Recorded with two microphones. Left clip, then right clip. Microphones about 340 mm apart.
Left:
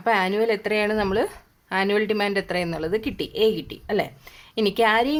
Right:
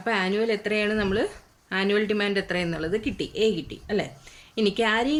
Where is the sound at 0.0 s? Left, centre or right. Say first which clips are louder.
Left 4 dB; centre.